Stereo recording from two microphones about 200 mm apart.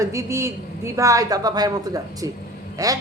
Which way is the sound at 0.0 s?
15° right (ahead or behind).